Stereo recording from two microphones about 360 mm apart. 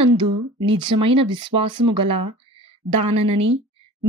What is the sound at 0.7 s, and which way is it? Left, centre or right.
Speech, centre.